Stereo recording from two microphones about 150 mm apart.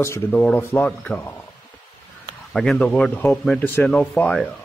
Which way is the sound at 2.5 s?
5° left (ahead or behind).